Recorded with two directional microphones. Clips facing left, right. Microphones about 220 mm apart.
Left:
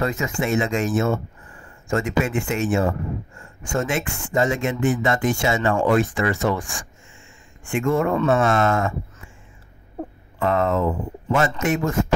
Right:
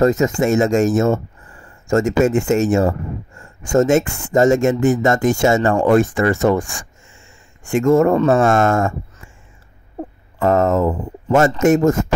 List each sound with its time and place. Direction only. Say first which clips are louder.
0.0 s speech: right 9 dB; 40° right (ahead or behind)
10.4 s speech: right 5 dB; 45° right (ahead or behind)